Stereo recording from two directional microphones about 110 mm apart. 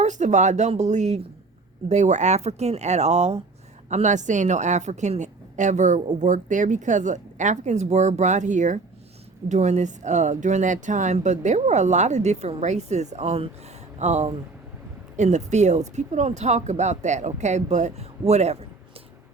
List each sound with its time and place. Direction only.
0.0 s speech: 90° right
3.8 s speech: 90° right; by 13.5 s 70° right (ahead or behind)
14.0 s speech: 90° right